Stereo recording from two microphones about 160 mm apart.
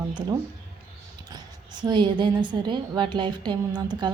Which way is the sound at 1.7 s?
30° right (ahead or behind).